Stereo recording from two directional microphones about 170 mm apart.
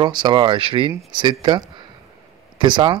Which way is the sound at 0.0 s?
25° right (ahead or behind).